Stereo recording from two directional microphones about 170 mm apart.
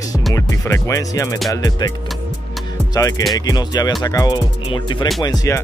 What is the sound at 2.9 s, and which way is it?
Speech, 20° left (ahead or behind).